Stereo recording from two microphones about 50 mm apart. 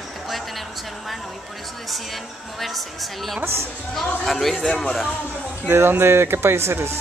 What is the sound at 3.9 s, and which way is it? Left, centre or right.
Speech, centre.